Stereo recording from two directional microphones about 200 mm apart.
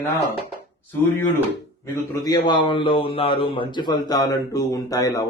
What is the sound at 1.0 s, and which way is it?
A man's voice, 10° left (ahead or behind).